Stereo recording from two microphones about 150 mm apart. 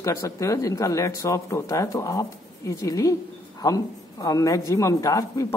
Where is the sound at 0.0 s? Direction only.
20° left (ahead or behind).